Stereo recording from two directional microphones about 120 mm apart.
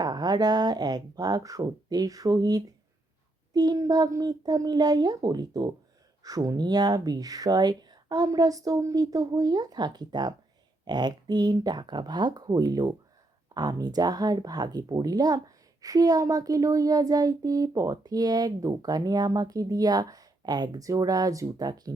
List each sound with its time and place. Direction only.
0.0 s speech: 35° right (ahead or behind)